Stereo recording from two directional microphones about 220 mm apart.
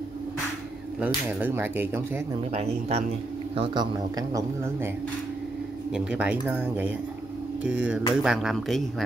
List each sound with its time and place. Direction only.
1.0 s speech: 10° right (ahead or behind)
2.5 s speech: 30° right (ahead or behind)
5.9 s speech: 5° right (ahead or behind)